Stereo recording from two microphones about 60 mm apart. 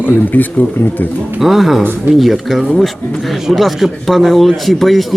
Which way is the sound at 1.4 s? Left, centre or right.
Centre.